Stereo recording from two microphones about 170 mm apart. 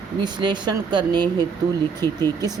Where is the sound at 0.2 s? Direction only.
25° right (ahead or behind).